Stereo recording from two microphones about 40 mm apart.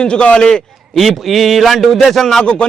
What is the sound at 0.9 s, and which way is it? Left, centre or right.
A man's voice, centre.